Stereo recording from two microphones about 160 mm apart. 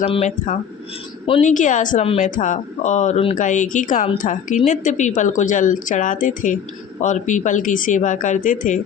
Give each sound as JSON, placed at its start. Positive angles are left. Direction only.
{"t": 0.0, "sound": "speech", "side_deg": 40}
{"t": 3.3, "sound": "speech", "side_deg": 50}